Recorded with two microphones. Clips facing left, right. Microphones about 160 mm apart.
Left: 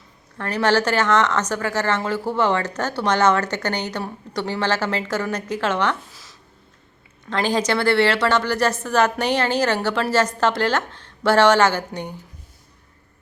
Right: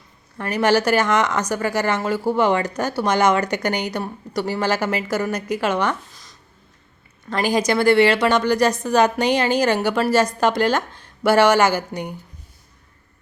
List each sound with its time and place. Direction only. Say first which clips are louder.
0.3 s a woman's voice: right 1 dB; 10° right (ahead or behind)
7.3 s a woman's voice: right 1 dB; 10° right (ahead or behind)